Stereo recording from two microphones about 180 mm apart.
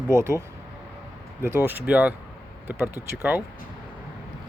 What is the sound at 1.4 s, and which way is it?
Speech, 10° right (ahead or behind).